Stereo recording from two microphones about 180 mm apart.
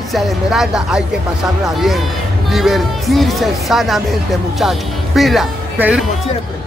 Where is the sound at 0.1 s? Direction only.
Centre (ahead or behind).